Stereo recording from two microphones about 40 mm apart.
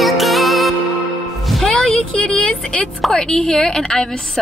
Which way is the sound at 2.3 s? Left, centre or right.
Centre.